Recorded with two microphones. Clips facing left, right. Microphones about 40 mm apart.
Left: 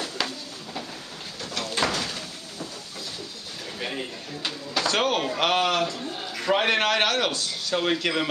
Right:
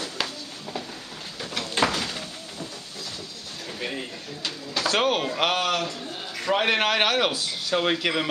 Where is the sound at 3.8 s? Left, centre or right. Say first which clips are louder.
Left 1 dB; centre.